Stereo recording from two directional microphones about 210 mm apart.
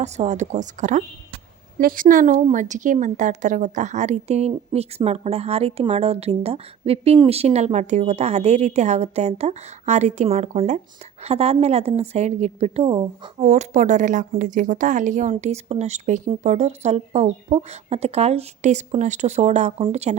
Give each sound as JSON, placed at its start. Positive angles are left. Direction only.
{"t": 0.0, "sound": "a woman's voice", "side_deg": -35}
{"t": 13.4, "sound": "a woman's voice", "side_deg": -35}